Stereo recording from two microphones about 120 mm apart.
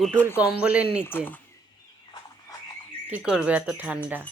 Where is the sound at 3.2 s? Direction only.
5° right (ahead or behind).